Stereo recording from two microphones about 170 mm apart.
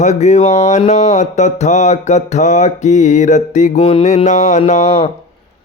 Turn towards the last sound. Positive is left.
turn(degrees=35)  # may be behind; listen again after turning